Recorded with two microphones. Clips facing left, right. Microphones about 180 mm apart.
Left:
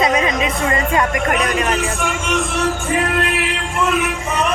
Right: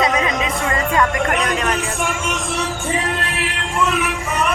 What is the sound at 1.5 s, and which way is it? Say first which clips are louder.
Speech: left 2 dB; centre (ahead or behind).